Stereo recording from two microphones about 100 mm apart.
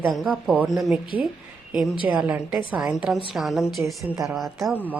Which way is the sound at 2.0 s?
15° right (ahead or behind).